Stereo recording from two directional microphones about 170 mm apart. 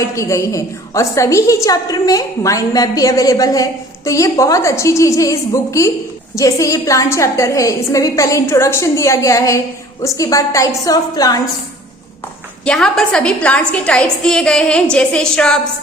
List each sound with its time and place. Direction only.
0.0 s a woman's voice: 15° left (ahead or behind)
12.6 s a woman's voice: 5° left (ahead or behind)